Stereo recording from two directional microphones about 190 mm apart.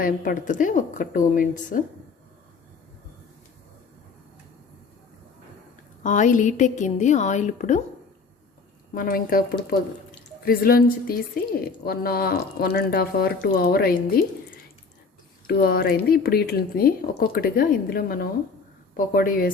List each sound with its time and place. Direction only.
0.0 s a woman's voice: 50° left (ahead or behind)
6.0 s a woman's voice: 40° left (ahead or behind)
9.0 s a woman's voice: 50° left (ahead or behind)